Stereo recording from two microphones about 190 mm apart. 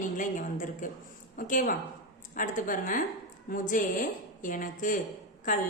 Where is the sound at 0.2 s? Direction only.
45° left (ahead or behind).